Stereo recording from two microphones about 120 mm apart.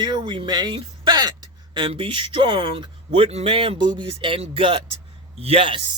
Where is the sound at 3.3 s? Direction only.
60° right (ahead or behind).